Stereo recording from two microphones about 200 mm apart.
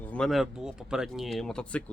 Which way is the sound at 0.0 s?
5° left (ahead or behind).